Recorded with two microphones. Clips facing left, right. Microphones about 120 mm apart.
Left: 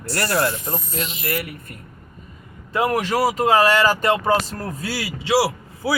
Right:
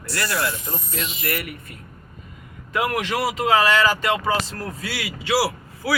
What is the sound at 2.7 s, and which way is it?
A man's voice, 30° left (ahead or behind).